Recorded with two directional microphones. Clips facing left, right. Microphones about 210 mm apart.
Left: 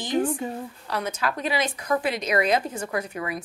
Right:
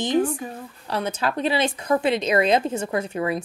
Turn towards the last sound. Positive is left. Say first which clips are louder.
# right 5 dB
turn(degrees=-25)  # may be behind; listen again after turning